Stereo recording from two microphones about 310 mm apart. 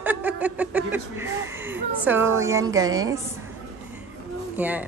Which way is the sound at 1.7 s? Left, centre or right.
Centre.